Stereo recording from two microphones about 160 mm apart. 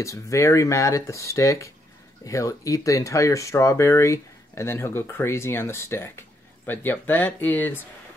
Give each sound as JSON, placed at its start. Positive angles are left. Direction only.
{"t": 0.0, "sound": "speech", "side_deg": 20}